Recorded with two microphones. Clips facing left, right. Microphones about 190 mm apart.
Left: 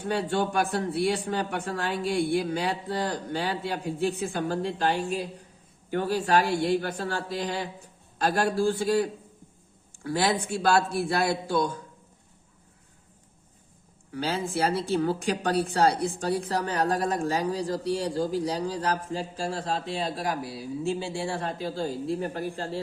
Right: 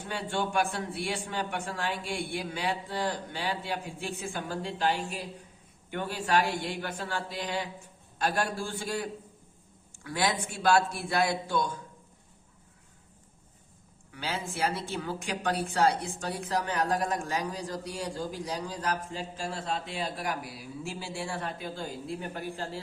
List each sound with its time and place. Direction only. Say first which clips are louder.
0.1 s a woman's voice: left 5 dB; 40° left (ahead or behind)
5.9 s a woman's voice: left 5 dB; 40° left (ahead or behind)
14.1 s a woman's voice: left 7 dB; 35° left (ahead or behind)